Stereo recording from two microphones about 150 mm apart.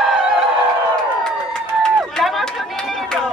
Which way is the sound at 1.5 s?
5° left (ahead or behind).